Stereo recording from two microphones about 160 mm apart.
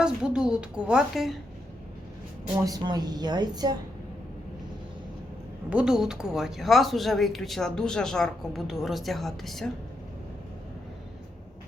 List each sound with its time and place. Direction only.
0.0 s a woman's voice: 5° right (ahead or behind)
2.6 s a woman's voice: 25° right (ahead or behind)
5.7 s a woman's voice: 5° right (ahead or behind)